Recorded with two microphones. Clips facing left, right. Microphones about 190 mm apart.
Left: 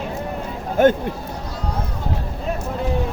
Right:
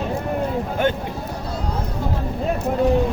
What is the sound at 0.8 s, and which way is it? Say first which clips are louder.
Speech: left 7 dB; 45° left (ahead or behind).